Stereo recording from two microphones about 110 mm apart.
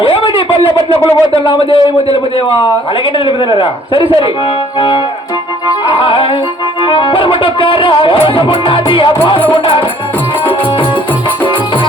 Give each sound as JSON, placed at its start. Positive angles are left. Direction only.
{"t": 0.0, "sound": "a sound", "side_deg": 50}
{"t": 1.3, "sound": "music", "side_deg": 55}
{"t": 5.9, "sound": "music", "side_deg": 55}